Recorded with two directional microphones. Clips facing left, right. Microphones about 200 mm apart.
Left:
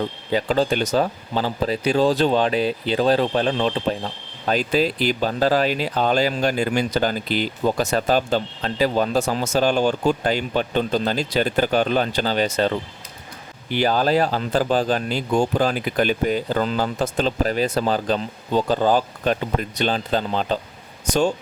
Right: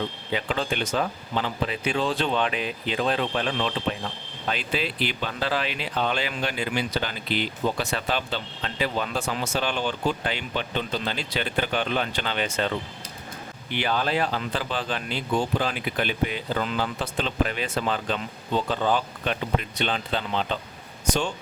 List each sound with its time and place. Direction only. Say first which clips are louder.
0.3 s speech: left 9 dB; 40° left (ahead or behind)